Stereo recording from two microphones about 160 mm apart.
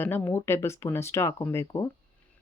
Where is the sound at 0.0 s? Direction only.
15° left (ahead or behind).